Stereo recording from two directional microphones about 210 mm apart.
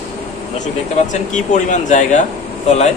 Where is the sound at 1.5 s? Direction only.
35° left (ahead or behind).